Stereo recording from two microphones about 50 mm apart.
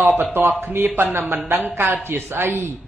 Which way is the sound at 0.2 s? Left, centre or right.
Right.